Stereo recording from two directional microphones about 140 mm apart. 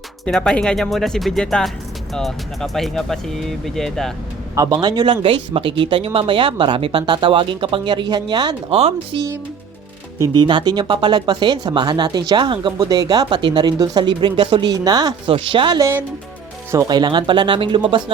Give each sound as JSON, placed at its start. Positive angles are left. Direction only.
{"t": 0.3, "sound": "speech", "side_deg": 5}
{"t": 4.5, "sound": "speech", "side_deg": -25}
{"t": 8.7, "sound": "speech", "side_deg": -45}
{"t": 10.2, "sound": "speech", "side_deg": -30}
{"t": 15.8, "sound": "speech", "side_deg": -20}